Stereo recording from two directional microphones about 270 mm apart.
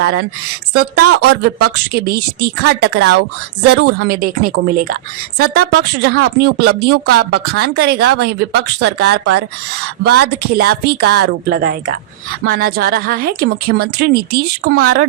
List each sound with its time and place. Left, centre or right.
0.0 s speech: right